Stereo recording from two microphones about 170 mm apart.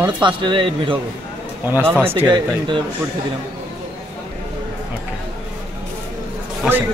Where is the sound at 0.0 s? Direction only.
25° right (ahead or behind).